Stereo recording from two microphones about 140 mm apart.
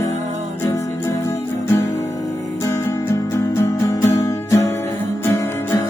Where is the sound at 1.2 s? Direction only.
20° left (ahead or behind).